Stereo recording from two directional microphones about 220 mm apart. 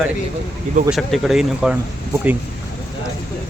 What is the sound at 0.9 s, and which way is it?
Speech, centre (ahead or behind).